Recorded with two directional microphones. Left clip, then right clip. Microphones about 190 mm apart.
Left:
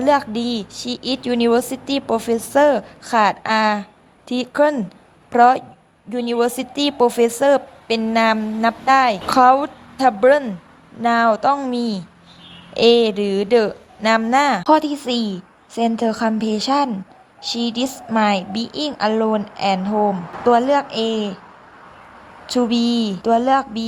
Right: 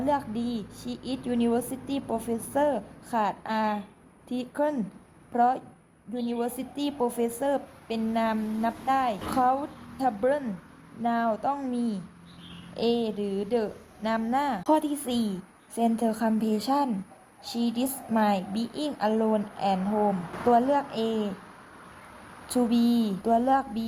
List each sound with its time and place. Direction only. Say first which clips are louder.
0.0 s a woman's voice: left 11 dB; 15° left (ahead or behind)
22.4 s a woman's voice: left 7 dB; 15° left (ahead or behind)